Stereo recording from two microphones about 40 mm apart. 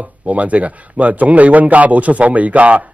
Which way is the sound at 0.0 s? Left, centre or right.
Right.